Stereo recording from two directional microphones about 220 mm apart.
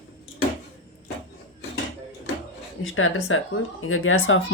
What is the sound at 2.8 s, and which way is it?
Speech, 65° left (ahead or behind).